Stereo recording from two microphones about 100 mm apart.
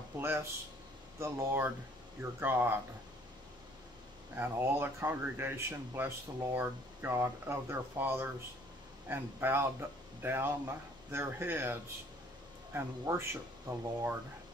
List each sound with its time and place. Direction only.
0.2 s speech: 25° right (ahead or behind)
4.4 s speech: 20° right (ahead or behind)